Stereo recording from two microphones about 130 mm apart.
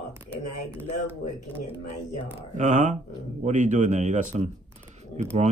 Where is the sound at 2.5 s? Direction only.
70° right (ahead or behind).